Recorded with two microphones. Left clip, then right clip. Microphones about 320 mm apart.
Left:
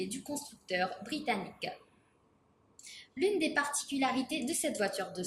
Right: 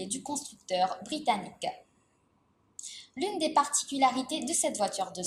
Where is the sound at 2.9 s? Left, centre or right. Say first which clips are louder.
Left 2 dB; centre.